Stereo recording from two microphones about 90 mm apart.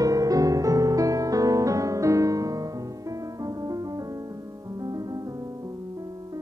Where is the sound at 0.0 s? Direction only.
40° right (ahead or behind).